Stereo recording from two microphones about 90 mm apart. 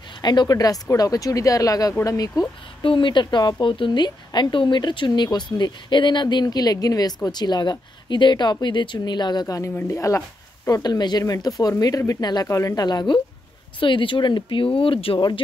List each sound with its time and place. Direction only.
0.2 s speech: 55° left (ahead or behind)
2.8 s a woman's voice: 70° left (ahead or behind); by 9.6 s 50° left (ahead or behind)
9.8 s speech: 35° left (ahead or behind)
10.8 s speech: 50° left (ahead or behind)
12.4 s speech: 35° left (ahead or behind); by 13.2 s 55° left (ahead or behind)
13.7 s speech: 70° left (ahead or behind); by 15.1 s 90° left
15.1 s a woman's voice: 55° left (ahead or behind)